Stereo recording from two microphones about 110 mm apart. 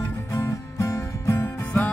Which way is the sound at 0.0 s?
25° left (ahead or behind).